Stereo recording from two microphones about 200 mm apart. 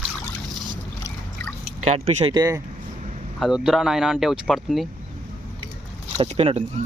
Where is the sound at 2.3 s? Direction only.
20° right (ahead or behind).